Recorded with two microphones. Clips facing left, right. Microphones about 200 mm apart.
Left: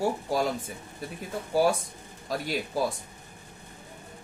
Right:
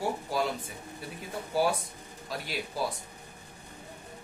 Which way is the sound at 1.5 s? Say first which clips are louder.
Left 4 dB; 45° left (ahead or behind).